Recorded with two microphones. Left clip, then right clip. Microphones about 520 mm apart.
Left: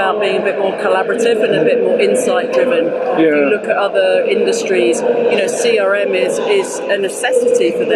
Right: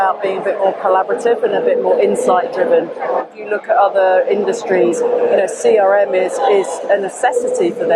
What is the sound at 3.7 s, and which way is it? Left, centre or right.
A woman's voice, right.